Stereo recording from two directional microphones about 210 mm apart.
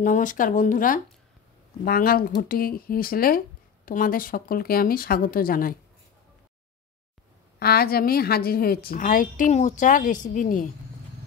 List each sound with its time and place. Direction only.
0.0 s a woman's voice: 40° left (ahead or behind)
7.5 s a woman's voice: 45° left (ahead or behind)